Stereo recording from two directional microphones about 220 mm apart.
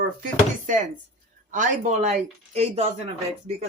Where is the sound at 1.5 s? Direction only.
35° right (ahead or behind).